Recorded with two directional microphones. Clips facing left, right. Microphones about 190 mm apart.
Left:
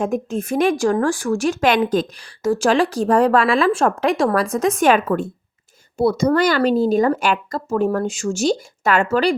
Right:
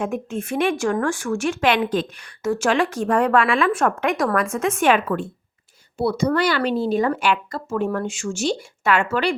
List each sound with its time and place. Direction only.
0.0 s a woman's voice: 40° left (ahead or behind)